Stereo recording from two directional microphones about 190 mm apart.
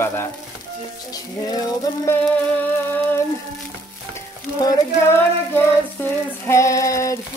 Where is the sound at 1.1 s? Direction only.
20° left (ahead or behind).